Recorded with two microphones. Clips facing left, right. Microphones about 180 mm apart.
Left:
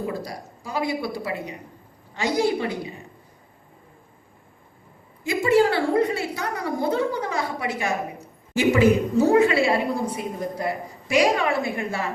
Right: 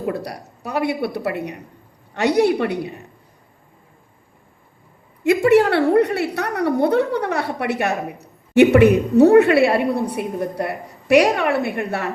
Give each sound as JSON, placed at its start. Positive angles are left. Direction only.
{"t": 0.0, "sound": "a woman's voice", "side_deg": -65}
{"t": 5.2, "sound": "a woman's voice", "side_deg": -65}